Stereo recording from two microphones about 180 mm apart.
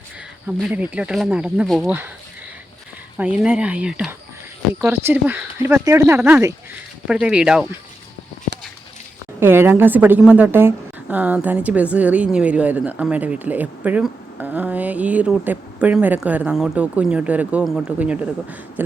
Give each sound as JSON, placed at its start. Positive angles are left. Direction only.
{"t": 0.4, "sound": "speech", "side_deg": -10}
{"t": 3.2, "sound": "a woman's voice", "side_deg": -5}
{"t": 9.4, "sound": "a woman's voice", "side_deg": -10}